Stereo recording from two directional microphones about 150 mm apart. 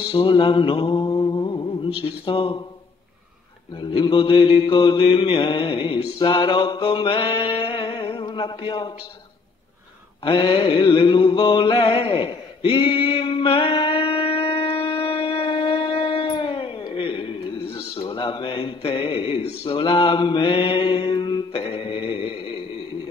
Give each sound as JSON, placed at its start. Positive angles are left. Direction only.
{"t": 0.1, "sound": "mantra", "side_deg": 35}
{"t": 3.8, "sound": "mantra", "side_deg": 30}
{"t": 10.2, "sound": "a sound", "side_deg": 35}
{"t": 19.6, "sound": "mantra", "side_deg": 35}